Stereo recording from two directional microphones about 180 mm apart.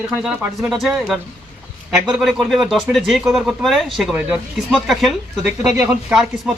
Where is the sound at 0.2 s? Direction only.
Centre (ahead or behind).